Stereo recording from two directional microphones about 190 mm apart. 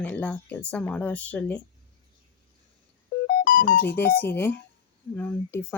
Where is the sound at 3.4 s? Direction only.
40° left (ahead or behind).